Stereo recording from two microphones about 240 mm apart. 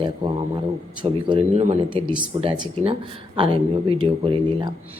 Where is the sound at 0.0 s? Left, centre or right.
Centre.